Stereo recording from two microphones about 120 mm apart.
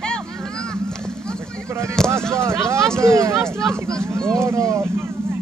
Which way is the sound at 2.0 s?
5° left (ahead or behind).